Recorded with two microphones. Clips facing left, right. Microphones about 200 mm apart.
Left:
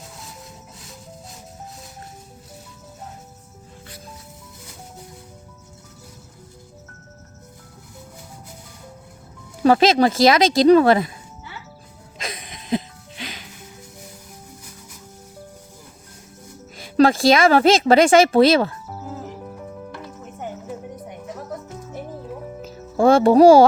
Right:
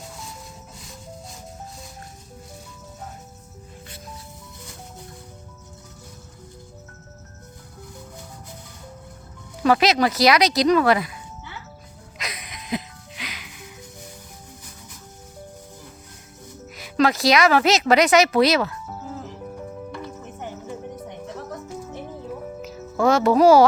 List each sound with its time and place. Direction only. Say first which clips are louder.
9.6 s speech: left 4 dB; 25° left (ahead or behind)
12.2 s music: left 3 dB; 25° left (ahead or behind)
16.7 s a woman's voice: left 5 dB; 30° left (ahead or behind)
23.0 s speech: left 5 dB; 30° left (ahead or behind)